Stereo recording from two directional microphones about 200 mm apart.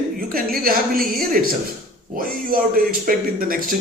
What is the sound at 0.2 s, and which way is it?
A woman's voice, 45° right (ahead or behind).